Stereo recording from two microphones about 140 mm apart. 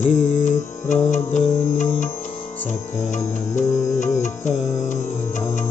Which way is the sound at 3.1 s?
60° left (ahead or behind).